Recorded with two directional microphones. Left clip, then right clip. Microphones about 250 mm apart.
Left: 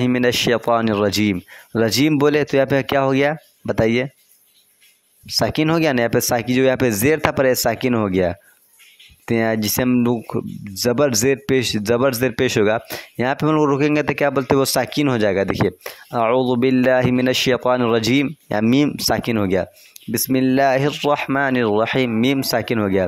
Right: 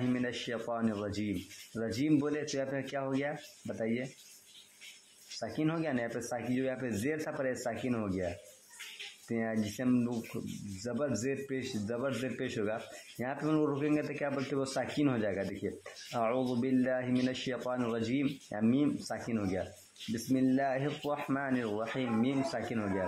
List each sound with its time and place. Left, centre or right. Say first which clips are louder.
0.0 s speech: left 18 dB; left
5.4 s speech: left 17 dB; left
9.3 s speech: left 17 dB; left